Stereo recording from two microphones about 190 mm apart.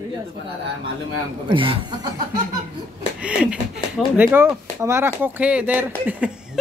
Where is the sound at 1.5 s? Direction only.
25° right (ahead or behind).